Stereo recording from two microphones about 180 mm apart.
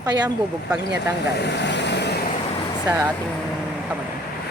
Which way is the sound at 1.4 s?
70° left (ahead or behind).